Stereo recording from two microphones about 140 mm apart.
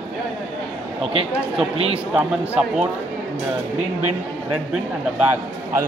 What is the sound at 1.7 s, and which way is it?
Speech, 45° right (ahead or behind).